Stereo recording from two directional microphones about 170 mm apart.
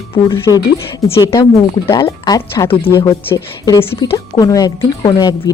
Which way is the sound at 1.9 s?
20° left (ahead or behind).